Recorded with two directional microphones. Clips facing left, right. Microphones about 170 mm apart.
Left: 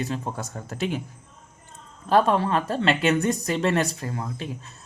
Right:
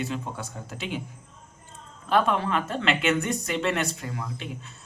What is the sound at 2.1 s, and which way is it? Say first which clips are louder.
A woman's voice: left 3 dB; 35° left (ahead or behind).